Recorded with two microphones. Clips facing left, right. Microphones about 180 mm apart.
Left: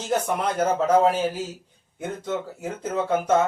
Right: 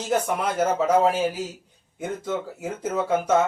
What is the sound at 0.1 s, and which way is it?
Speech, 5° right (ahead or behind).